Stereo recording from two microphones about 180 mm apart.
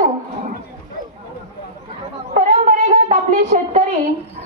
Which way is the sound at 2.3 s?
45° right (ahead or behind).